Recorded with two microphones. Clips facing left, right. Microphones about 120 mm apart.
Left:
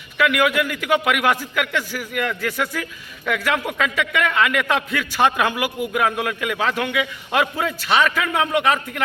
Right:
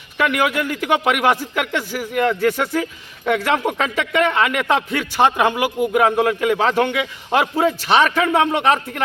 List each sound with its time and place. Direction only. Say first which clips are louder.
0.2 s a man's voice: even; 35° right (ahead or behind)